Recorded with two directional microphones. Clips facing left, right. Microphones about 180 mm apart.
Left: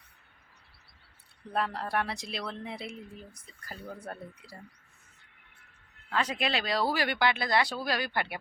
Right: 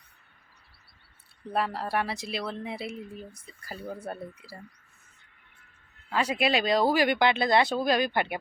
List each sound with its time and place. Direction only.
1.5 s speech: 5° right (ahead or behind)
6.1 s speech: 10° right (ahead or behind)